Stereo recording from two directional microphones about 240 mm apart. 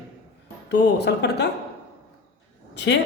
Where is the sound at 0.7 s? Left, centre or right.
Left.